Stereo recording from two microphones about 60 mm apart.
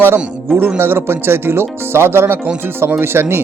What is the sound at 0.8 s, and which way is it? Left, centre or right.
Speech, right.